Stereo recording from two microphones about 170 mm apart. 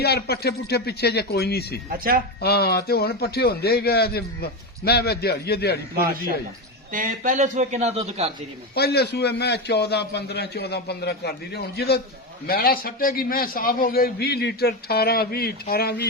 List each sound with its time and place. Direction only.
0.0 s a man's voice: 70° left (ahead or behind)
1.9 s speech: 60° right (ahead or behind)
2.4 s a man's voice: 70° left (ahead or behind)
6.9 s a man's voice: 50° right (ahead or behind)
8.7 s a man's voice: 70° left (ahead or behind)